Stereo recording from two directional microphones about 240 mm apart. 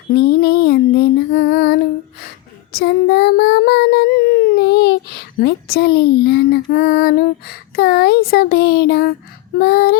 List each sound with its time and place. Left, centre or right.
0.1 s female singing: left
2.7 s child singing: left
9.6 s a sound: left